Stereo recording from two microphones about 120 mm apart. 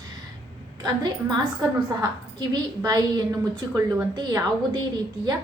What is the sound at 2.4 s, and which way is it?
A woman's voice, 35° right (ahead or behind).